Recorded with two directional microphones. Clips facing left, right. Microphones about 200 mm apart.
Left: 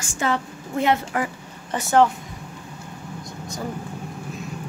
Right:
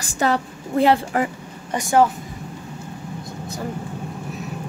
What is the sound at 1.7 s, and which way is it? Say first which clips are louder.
Speech: right 1 dB; 10° right (ahead or behind).